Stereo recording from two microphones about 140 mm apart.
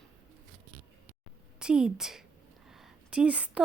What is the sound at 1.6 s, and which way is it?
A woman's voice, 5° right (ahead or behind).